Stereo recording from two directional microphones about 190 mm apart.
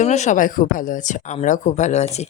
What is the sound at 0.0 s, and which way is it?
A woman's voice, 40° left (ahead or behind).